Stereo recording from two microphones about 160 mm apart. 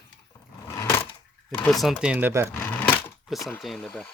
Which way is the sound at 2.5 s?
10° left (ahead or behind).